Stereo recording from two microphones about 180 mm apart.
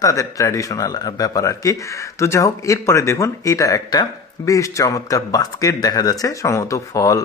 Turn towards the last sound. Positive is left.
turn(degrees=15)  # may be behind; listen again after turning